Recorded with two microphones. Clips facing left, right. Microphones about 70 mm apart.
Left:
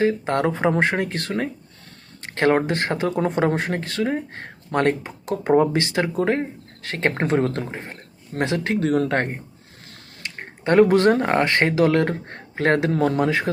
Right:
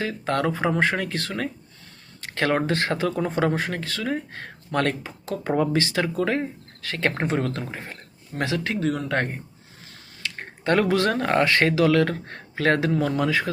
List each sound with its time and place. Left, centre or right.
0.0 s speech: left
2.2 s a sound: left
2.6 s speech: left
7.2 s speech: left
7.7 s speech: left
10.2 s speech: left